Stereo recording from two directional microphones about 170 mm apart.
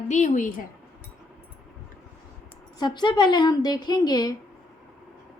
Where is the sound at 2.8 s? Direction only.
25° left (ahead or behind).